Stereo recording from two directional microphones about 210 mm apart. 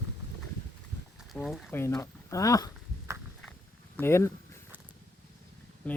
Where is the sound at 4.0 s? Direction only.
10° left (ahead or behind).